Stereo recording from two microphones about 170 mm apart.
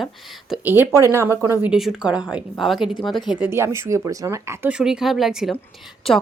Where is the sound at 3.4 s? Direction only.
15° right (ahead or behind).